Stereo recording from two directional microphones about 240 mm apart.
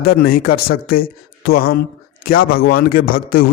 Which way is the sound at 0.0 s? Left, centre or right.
Left.